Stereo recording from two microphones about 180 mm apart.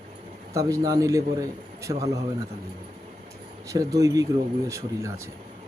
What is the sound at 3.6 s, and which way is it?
A man's voice, 20° right (ahead or behind).